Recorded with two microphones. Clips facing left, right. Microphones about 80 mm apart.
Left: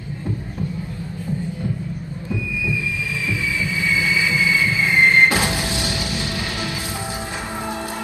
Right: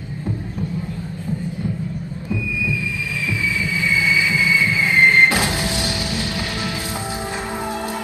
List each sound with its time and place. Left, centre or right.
3.9 s vehicle: left
4.6 s train: left
5.3 s a sound: left
5.5 s music: right